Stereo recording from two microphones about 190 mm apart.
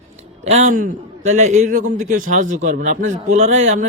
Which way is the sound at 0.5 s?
40° right (ahead or behind).